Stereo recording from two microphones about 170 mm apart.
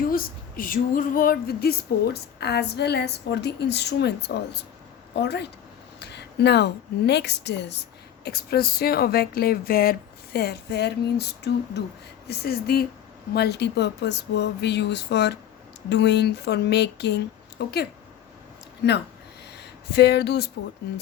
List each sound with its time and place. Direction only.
0.0 s speech: 60° left (ahead or behind)
2.4 s a woman's voice: 80° left
8.2 s speech: 70° left (ahead or behind); by 17.2 s 85° left
17.6 s a woman's voice: 75° left (ahead or behind)
19.5 s speech: 75° left (ahead or behind)